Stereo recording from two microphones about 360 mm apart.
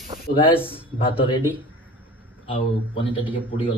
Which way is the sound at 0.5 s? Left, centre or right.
Centre.